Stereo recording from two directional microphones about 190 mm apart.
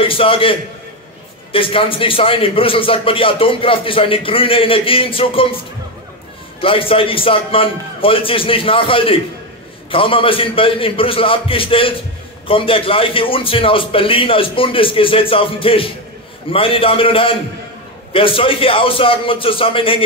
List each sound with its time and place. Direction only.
0.0 s a man's voice: 30° left (ahead or behind)
6.6 s a man's voice: 30° left (ahead or behind)